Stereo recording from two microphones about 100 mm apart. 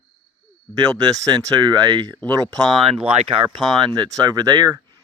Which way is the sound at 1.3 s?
50° right (ahead or behind).